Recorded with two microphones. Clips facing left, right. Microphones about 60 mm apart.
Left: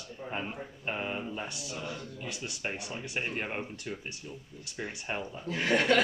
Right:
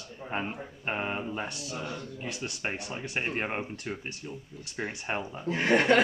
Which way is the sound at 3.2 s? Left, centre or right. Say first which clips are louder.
Right 3 dB; right.